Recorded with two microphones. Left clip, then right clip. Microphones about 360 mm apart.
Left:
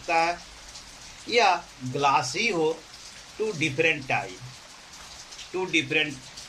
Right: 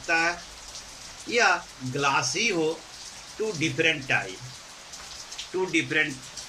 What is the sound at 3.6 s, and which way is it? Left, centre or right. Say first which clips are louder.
Speech: even; centre.